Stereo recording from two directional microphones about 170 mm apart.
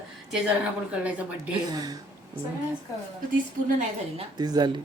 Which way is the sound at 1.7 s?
20° right (ahead or behind).